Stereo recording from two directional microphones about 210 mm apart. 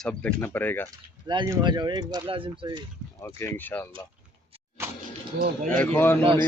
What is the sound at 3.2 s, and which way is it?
Speech, 10° left (ahead or behind).